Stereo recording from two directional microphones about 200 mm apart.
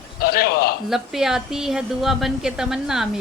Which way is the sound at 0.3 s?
50° left (ahead or behind).